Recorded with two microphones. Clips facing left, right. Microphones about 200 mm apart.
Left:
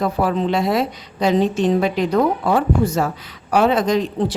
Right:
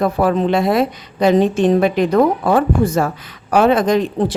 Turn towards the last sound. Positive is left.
turn(degrees=-55)  # may be behind; listen again after turning